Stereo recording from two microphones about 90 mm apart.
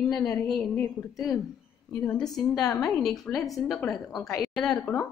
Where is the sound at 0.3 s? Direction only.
5° left (ahead or behind).